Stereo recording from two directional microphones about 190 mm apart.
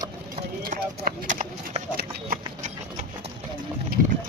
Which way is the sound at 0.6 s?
50° right (ahead or behind).